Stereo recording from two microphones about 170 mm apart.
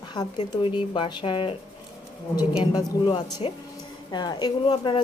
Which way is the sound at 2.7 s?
25° left (ahead or behind).